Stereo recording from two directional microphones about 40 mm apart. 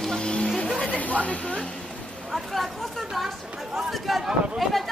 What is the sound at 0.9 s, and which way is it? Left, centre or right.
Speech, left.